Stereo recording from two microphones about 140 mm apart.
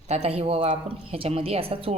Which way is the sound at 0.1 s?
50° right (ahead or behind).